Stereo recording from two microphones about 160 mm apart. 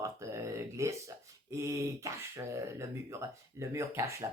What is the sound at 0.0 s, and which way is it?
Speech, 20° right (ahead or behind).